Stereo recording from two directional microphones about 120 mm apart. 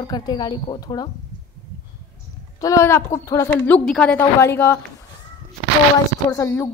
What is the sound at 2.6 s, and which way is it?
A woman's voice, 25° left (ahead or behind).